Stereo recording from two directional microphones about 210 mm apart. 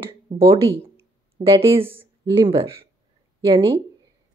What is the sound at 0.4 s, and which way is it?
A woman's voice, 15° right (ahead or behind).